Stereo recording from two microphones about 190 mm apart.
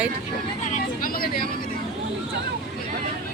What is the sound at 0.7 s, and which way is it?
Vehicle, 50° left (ahead or behind).